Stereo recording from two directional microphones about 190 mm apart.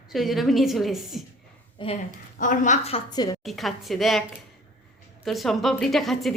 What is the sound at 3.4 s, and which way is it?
Speech, centre (ahead or behind).